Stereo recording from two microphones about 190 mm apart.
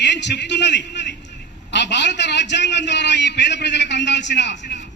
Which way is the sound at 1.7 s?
65° left (ahead or behind).